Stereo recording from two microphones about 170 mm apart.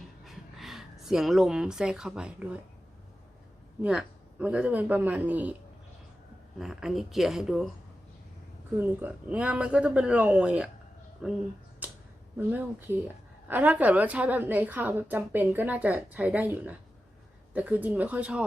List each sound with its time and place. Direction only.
0.3 s speech: centre (ahead or behind)
3.8 s a woman's voice: 5° right (ahead or behind)
6.6 s a woman's voice: 5° right (ahead or behind)
8.7 s a woman's voice: 10° right (ahead or behind)
11.8 s a sound: 10° right (ahead or behind)
12.4 s a woman's voice: 10° right (ahead or behind)